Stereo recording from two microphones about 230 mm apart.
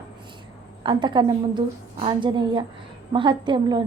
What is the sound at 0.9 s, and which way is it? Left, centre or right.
A woman's voice, centre.